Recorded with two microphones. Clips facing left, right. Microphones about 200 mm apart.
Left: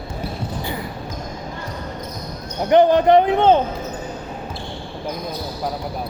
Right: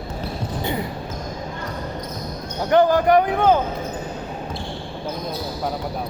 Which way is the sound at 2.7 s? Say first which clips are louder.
Left 3 dB; 20° left (ahead or behind).